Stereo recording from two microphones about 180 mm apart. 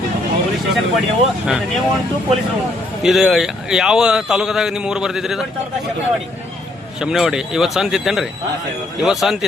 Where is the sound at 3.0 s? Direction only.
Centre (ahead or behind).